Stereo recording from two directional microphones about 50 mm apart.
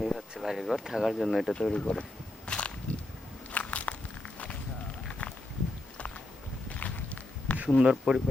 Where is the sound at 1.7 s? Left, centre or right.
Left.